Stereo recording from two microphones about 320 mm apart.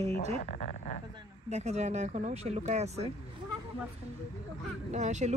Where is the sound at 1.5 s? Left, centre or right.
Right.